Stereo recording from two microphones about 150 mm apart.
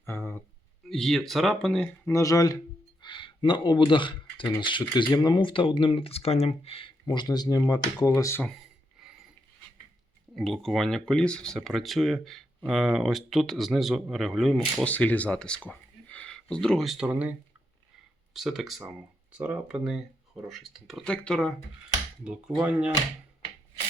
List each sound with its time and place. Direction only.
0.0 s speech: 15° left (ahead or behind)
0.9 s speech: centre (ahead or behind)
2.0 s speech: 20° left (ahead or behind)
3.0 s a sound: 30° left (ahead or behind)
4.6 s speech: 30° left (ahead or behind)
7.0 s speech: 30° left (ahead or behind)
9.0 s ratchet: 5° right (ahead or behind)
10.3 s speech: centre (ahead or behind)
18.3 s speech: centre (ahead or behind)